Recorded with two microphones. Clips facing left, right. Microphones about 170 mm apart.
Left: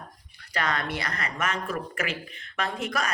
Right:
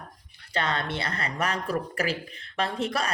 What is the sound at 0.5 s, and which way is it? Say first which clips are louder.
A woman's voice: even; 25° right (ahead or behind).